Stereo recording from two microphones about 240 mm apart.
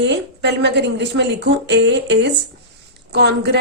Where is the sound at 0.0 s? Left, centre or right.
Right.